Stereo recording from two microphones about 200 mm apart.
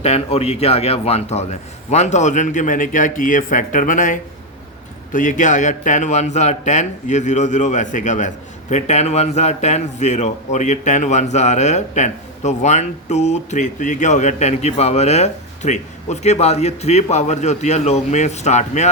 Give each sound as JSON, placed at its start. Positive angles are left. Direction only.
{"t": 0.0, "sound": "a man's voice", "side_deg": 30}